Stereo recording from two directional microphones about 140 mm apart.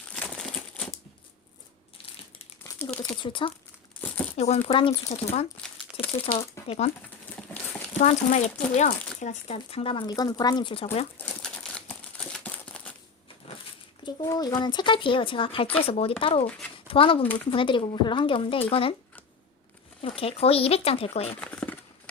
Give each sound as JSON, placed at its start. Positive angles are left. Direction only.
{"t": 0.1, "sound": "crumpling", "side_deg": 5}
{"t": 2.7, "sound": "crumpling", "side_deg": 25}
{"t": 3.2, "sound": "speech", "side_deg": 35}
{"t": 4.4, "sound": "speech", "side_deg": 50}
{"t": 5.5, "sound": "crumpling", "side_deg": 5}
{"t": 6.7, "sound": "speech", "side_deg": 45}
{"t": 7.9, "sound": "speech", "side_deg": 60}
{"t": 9.6, "sound": "speech", "side_deg": 45}
{"t": 11.2, "sound": "crumpling", "side_deg": 5}
{"t": 14.3, "sound": "speech", "side_deg": 25}
{"t": 20.0, "sound": "speech", "side_deg": 45}
{"t": 21.4, "sound": "a sound", "side_deg": 10}